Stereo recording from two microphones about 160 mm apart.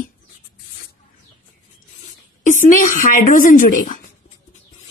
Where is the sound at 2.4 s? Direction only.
50° left (ahead or behind).